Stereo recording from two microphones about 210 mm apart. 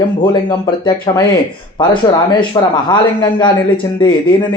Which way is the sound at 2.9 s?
20° left (ahead or behind).